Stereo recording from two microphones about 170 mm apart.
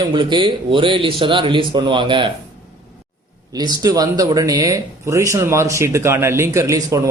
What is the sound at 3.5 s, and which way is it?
Speech, 25° right (ahead or behind).